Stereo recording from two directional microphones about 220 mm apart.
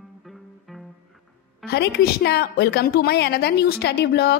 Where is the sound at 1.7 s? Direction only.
45° left (ahead or behind).